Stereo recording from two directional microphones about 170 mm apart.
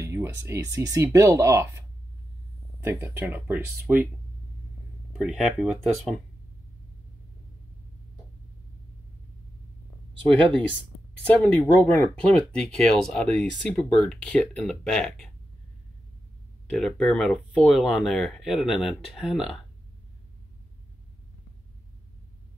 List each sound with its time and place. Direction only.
0.0 s speech: 15° right (ahead or behind)
2.8 s speech: 15° right (ahead or behind)
5.1 s speech: centre (ahead or behind)
11.2 s speech: 5° left (ahead or behind)
16.7 s speech: 5° left (ahead or behind)